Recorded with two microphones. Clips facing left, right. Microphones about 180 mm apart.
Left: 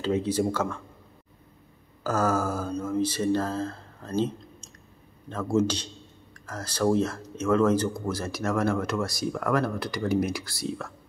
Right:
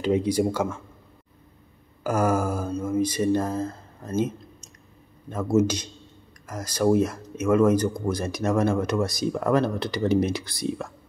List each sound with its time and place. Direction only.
0.0 s speech: 15° right (ahead or behind)
2.0 s speech: 10° right (ahead or behind)
5.3 s speech: 10° right (ahead or behind)